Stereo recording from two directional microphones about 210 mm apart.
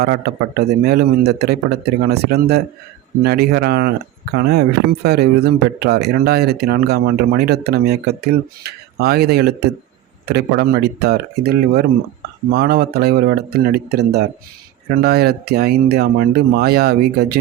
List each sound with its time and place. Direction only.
0.0 s speech: 50° right (ahead or behind)